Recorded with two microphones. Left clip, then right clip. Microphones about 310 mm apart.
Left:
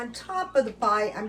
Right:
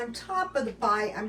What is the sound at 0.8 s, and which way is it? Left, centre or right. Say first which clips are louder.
Speech: left 2 dB; centre.